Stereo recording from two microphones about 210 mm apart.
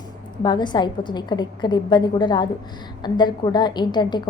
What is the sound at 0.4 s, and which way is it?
A woman's voice, 20° left (ahead or behind).